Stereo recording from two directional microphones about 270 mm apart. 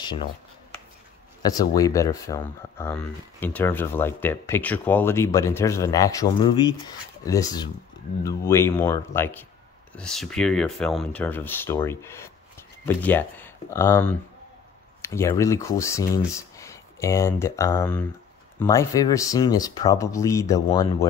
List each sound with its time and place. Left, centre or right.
0.0 s speech: centre
1.4 s speech: centre